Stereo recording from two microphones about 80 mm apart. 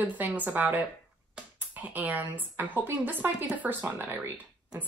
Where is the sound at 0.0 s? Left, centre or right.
Right.